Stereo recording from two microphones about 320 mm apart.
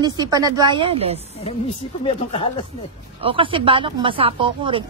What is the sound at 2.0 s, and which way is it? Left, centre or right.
Speech, centre.